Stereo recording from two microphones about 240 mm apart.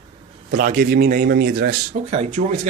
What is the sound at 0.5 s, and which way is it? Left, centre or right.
Speech, right.